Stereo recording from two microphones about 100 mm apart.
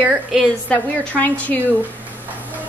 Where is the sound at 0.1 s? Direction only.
10° right (ahead or behind).